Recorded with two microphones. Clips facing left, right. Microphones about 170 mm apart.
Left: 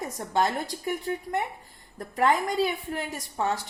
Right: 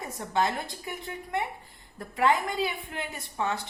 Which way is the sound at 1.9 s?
40° left (ahead or behind).